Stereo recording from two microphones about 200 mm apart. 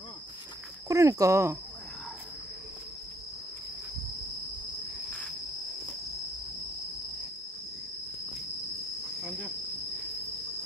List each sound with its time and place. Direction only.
0.8 s speech: 15° right (ahead or behind)
9.2 s cricket: 5° right (ahead or behind)